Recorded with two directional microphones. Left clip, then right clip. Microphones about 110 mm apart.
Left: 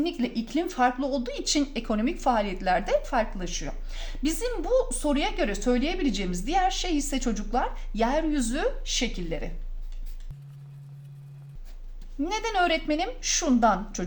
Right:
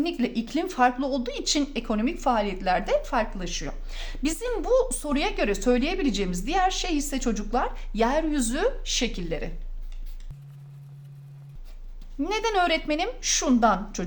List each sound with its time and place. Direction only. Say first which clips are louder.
0.0 s speech: right 1 dB; 40° right (ahead or behind); by 3.8 s 15° right (ahead or behind)
3.9 s a woman's voice: even; 35° right (ahead or behind)
12.2 s a woman's voice: right 2 dB; 35° right (ahead or behind)